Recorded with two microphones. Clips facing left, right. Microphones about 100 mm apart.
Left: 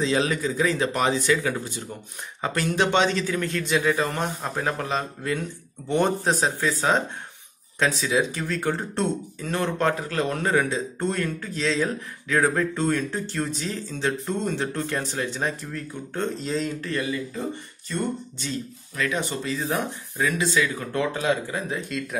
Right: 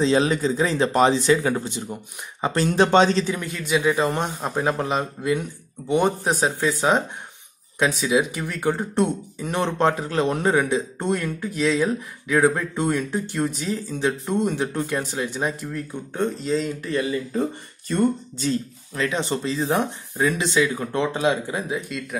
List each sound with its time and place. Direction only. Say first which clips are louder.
0.0 s speech: right 4 dB; 30° right (ahead or behind)
3.3 s a man's voice: even; 5° right (ahead or behind)
4.0 s speech: right 3 dB; 20° right (ahead or behind)
16.3 s a man's voice: right 3 dB; centre (ahead or behind)
18.9 s speech: right 3 dB; 25° right (ahead or behind)
21.6 s a man's voice: right 1 dB; 5° right (ahead or behind)